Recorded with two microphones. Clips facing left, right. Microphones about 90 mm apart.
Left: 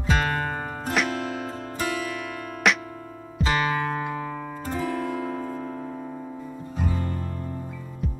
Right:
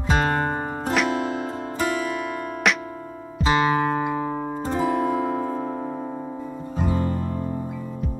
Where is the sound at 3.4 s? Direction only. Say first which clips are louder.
Right 5 dB; 25° right (ahead or behind).